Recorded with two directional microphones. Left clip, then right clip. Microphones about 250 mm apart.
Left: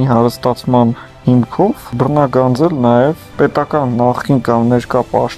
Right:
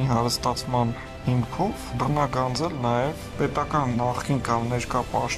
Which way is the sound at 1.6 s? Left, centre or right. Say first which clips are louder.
Left 13 dB; left.